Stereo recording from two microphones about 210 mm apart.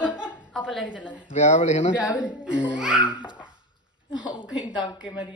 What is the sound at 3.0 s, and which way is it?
A woman's voice, 20° left (ahead or behind).